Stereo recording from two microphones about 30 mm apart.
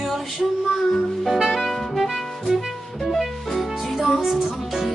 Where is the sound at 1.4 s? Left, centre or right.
Centre.